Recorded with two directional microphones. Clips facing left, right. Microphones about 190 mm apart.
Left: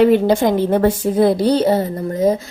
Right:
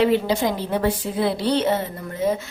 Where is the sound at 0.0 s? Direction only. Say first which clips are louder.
Left 6 dB; 50° left (ahead or behind).